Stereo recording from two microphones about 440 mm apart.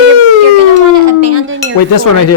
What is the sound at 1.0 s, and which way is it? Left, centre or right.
Speech, right.